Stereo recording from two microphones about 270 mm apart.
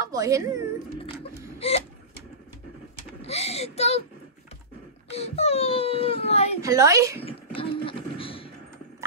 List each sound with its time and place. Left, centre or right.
0.0 s speech: centre
1.6 s a sound: left
3.3 s speech: left
5.1 s a child's voice: left
6.6 s a woman's voice: centre
7.2 s a sound: centre